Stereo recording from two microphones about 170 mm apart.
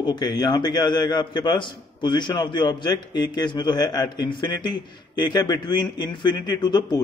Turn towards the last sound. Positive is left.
turn(degrees=25)  # may be behind; listen again after turning